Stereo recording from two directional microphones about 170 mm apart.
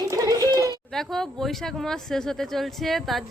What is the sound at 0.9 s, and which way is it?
Speech, centre (ahead or behind).